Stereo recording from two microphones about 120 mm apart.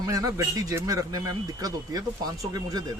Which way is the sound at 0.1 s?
30° right (ahead or behind).